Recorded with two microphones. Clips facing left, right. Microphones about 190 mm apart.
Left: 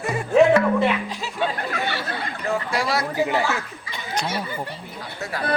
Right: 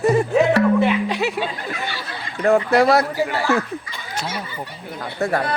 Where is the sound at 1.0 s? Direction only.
70° right (ahead or behind).